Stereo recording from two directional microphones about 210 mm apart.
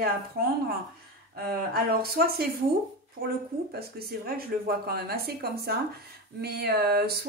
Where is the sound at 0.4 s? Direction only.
45° right (ahead or behind).